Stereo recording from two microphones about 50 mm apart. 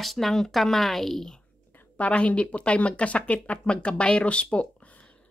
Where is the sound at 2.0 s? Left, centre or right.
Left.